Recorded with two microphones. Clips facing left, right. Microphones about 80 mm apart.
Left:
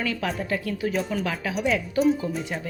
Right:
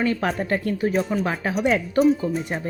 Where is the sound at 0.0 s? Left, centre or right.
Right.